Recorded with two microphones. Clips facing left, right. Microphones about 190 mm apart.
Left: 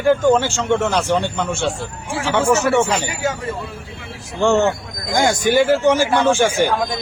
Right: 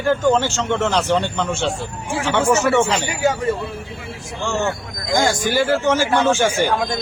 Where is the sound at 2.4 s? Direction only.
15° right (ahead or behind).